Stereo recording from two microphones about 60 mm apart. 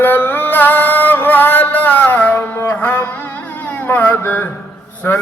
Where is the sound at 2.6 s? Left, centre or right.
Left.